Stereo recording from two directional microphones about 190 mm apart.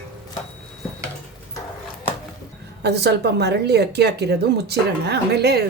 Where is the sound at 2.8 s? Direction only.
60° right (ahead or behind).